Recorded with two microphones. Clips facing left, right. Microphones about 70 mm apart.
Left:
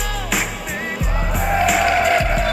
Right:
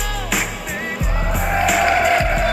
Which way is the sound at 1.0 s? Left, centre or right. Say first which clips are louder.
Even; centre.